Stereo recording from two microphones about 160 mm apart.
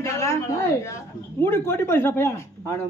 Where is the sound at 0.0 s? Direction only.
15° left (ahead or behind).